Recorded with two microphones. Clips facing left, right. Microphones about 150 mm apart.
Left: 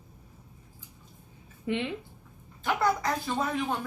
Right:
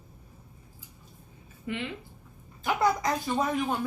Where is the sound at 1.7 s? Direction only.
25° left (ahead or behind).